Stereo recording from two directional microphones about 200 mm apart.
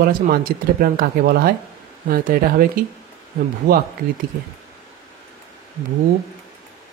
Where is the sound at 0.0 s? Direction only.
45° right (ahead or behind).